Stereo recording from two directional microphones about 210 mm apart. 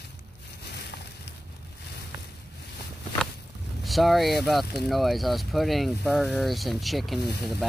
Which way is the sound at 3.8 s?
Centre (ahead or behind).